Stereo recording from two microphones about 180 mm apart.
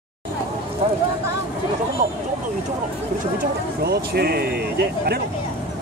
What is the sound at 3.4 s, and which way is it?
Speech, 60° right (ahead or behind).